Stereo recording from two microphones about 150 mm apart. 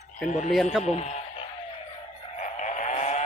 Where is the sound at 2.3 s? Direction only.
55° left (ahead or behind).